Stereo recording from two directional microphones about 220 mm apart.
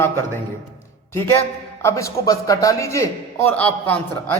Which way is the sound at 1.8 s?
15° left (ahead or behind).